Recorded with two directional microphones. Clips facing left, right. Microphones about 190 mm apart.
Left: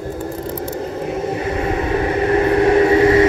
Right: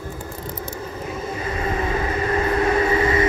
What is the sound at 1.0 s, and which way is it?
Vehicle, 65° left (ahead or behind).